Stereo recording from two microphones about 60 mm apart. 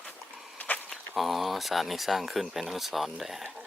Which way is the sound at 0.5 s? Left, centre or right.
Left.